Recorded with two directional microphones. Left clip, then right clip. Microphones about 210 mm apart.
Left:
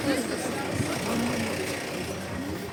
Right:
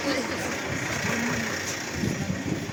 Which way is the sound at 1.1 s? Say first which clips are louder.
Right 1 dB; 55° left (ahead or behind).